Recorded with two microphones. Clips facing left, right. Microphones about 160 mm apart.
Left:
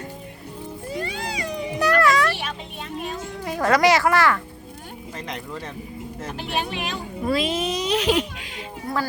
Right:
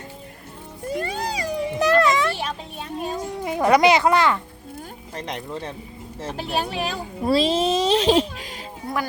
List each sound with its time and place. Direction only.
0.9 s music: 45° right (ahead or behind)
1.8 s music: 20° right (ahead or behind)
3.4 s speech: 15° right (ahead or behind)
5.1 s a child's voice: 30° right (ahead or behind)
8.9 s a sound: 25° right (ahead or behind)